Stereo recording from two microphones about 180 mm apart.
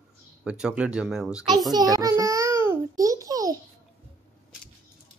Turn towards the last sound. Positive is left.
turn(degrees=-20)  # may be behind; listen again after turning